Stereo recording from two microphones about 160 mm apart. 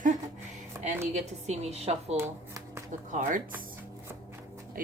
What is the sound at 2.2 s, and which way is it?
Speech, 15° right (ahead or behind).